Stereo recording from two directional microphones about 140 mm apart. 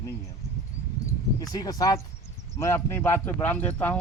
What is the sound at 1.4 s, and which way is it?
Speech, 25° left (ahead or behind).